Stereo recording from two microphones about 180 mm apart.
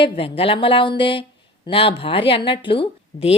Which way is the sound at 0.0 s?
30° left (ahead or behind).